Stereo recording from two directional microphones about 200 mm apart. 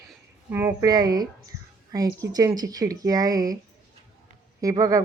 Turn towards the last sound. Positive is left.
turn(degrees=-15)  # may be behind; listen again after turning